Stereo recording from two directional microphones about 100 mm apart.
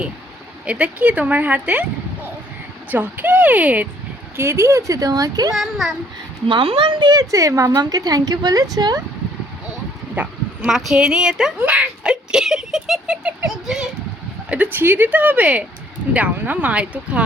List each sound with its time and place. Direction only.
0.6 s a woman's voice: 10° right (ahead or behind)
2.9 s a woman's voice: 15° right (ahead or behind)
4.4 s a woman's voice: 30° right (ahead or behind)
5.5 s a child's voice: 5° right (ahead or behind)
6.5 s a woman's voice: 60° right (ahead or behind)
7.1 s a woman's voice: 35° right (ahead or behind)
10.2 s speech: 20° right (ahead or behind)
10.7 s a woman's voice: 5° right (ahead or behind)
14.5 s a woman's voice: 20° right (ahead or behind)